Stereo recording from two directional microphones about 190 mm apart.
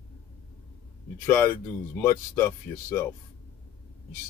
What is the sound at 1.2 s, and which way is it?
Speech, 10° left (ahead or behind).